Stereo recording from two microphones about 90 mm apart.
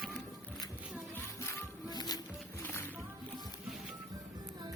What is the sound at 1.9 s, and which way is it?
Music, 45° left (ahead or behind).